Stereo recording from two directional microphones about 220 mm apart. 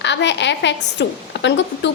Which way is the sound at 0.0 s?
55° left (ahead or behind).